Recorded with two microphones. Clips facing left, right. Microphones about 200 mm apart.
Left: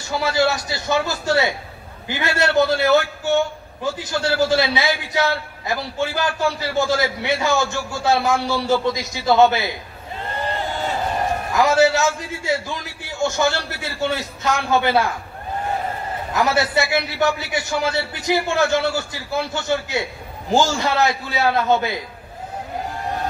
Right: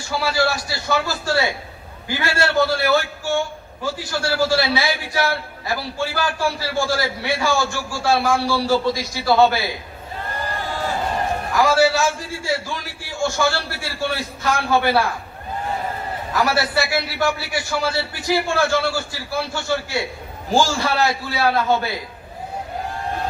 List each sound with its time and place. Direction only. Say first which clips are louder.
0.1 s a man's voice: left 2 dB; 20° left (ahead or behind)
11.5 s a man's voice: left 1 dB; 20° left (ahead or behind)
16.3 s a man's voice: left 1 dB; 20° left (ahead or behind)